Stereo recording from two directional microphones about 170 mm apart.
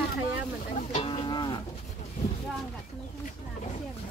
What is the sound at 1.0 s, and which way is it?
Cattle, 30° left (ahead or behind).